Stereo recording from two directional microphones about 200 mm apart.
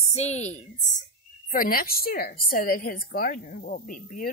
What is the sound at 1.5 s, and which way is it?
A woman's voice, 45° left (ahead or behind).